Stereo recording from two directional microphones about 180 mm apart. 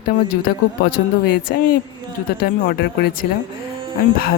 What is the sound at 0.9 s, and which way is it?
Speech, 55° left (ahead or behind).